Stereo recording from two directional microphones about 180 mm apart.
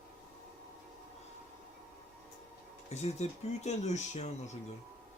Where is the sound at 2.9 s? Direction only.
40° left (ahead or behind).